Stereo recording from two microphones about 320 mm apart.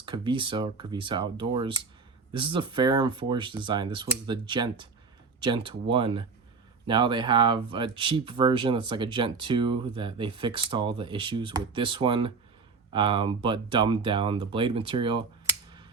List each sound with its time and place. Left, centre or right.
0.0 s speech: centre